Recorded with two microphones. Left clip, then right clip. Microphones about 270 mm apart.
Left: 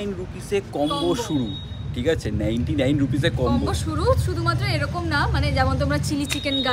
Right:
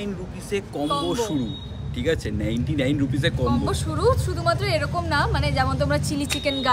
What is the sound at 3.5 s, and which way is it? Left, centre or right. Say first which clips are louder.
Speech: left 1 dB; centre.